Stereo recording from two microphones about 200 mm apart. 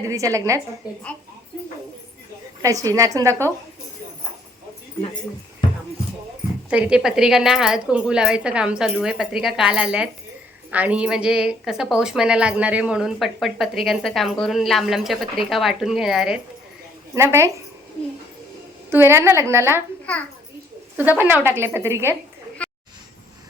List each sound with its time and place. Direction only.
0.1 s a woman's voice: 15° right (ahead or behind)
2.6 s a woman's voice: 15° right (ahead or behind)
6.7 s a woman's voice: 5° right (ahead or behind)
17.2 s a woman's voice: 15° right (ahead or behind)
18.9 s a woman's voice: 10° right (ahead or behind)
20.9 s a woman's voice: 10° right (ahead or behind)
22.6 s a sound: 5° left (ahead or behind)